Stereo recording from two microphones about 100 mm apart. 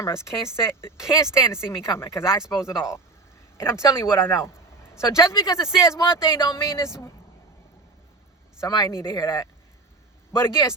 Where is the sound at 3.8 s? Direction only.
25° left (ahead or behind).